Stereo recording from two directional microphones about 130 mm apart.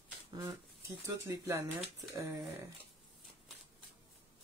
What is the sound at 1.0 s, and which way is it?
Speech, 25° right (ahead or behind).